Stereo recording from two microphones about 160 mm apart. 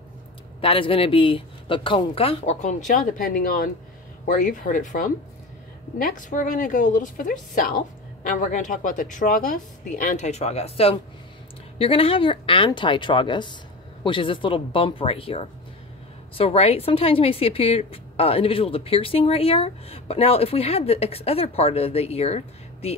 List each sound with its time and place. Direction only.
0.6 s speech: 35° left (ahead or behind)
2.9 s a woman's voice: 60° left (ahead or behind); by 22.9 s 40° left (ahead or behind)